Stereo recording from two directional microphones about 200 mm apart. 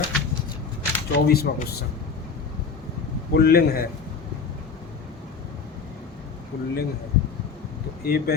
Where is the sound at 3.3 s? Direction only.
50° left (ahead or behind).